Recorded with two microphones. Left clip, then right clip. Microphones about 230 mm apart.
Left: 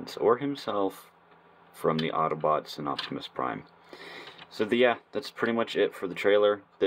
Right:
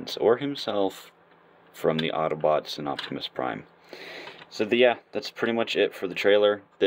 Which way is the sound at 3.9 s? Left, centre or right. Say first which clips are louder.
Right 4 dB; right.